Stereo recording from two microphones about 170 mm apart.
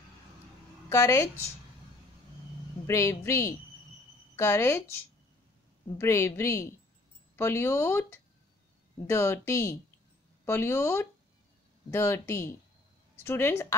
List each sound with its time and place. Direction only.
0.8 s a woman's voice: 20° left (ahead or behind)
2.9 s speech: 15° left (ahead or behind)